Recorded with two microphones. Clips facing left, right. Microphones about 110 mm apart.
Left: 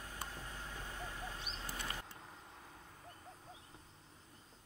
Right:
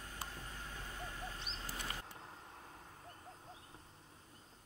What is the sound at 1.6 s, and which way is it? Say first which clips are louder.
Vehicle: even; 25° left (ahead or behind).